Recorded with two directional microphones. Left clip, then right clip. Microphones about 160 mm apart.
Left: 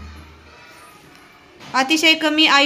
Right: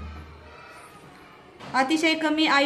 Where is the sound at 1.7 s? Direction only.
20° left (ahead or behind).